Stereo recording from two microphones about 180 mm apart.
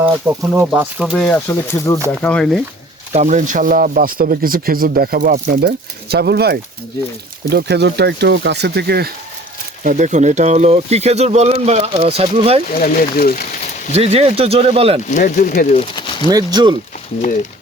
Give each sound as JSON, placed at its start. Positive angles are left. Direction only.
{"t": 0.0, "sound": "speech", "side_deg": -10}
{"t": 1.1, "sound": "speech", "side_deg": 10}
{"t": 3.1, "sound": "speech", "side_deg": -40}
{"t": 9.8, "sound": "speech", "side_deg": -45}
{"t": 12.7, "sound": "speech", "side_deg": 55}
{"t": 13.1, "sound": "a sound", "side_deg": 55}
{"t": 13.9, "sound": "speech", "side_deg": -35}
{"t": 15.1, "sound": "speech", "side_deg": 45}
{"t": 16.0, "sound": "a sound", "side_deg": 25}
{"t": 16.3, "sound": "speech", "side_deg": -25}
{"t": 17.2, "sound": "speech", "side_deg": 40}